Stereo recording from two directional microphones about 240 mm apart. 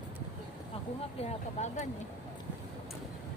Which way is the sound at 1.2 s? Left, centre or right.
Left.